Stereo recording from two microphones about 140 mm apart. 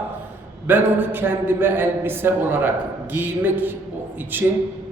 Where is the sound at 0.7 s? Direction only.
15° right (ahead or behind).